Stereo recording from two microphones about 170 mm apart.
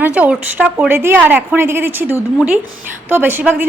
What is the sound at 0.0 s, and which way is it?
A woman's voice, 5° right (ahead or behind).